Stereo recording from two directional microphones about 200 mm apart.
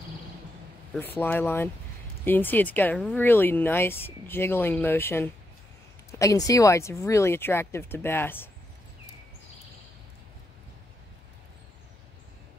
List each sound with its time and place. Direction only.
0.9 s speech: 10° left (ahead or behind)